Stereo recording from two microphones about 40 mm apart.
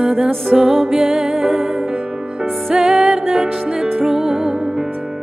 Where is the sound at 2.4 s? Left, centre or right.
Centre.